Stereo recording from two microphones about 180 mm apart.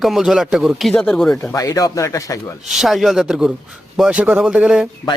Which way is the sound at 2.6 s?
Centre (ahead or behind).